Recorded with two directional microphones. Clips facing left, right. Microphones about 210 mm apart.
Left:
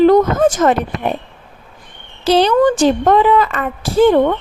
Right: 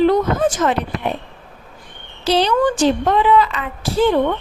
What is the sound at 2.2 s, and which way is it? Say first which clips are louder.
A woman's voice: left 4 dB; 50° left (ahead or behind).